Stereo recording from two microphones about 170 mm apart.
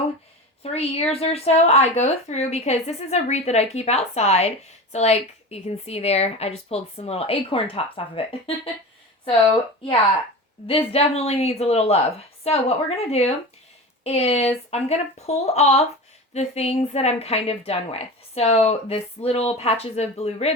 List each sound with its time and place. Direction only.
0.6 s speech: 35° left (ahead or behind)
10.7 s speech: 35° left (ahead or behind)